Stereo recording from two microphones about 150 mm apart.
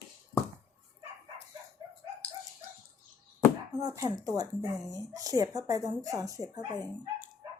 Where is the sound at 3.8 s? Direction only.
25° right (ahead or behind).